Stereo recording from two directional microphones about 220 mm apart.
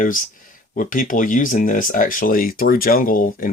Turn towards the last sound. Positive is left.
turn(degrees=40)  # may be behind; listen again after turning